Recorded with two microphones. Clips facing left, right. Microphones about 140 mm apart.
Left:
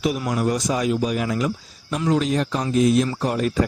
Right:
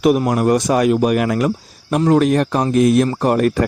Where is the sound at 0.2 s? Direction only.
55° right (ahead or behind).